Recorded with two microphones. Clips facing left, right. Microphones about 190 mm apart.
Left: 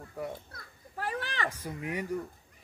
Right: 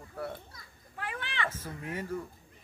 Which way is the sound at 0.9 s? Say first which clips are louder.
Left 3 dB; 40° left (ahead or behind).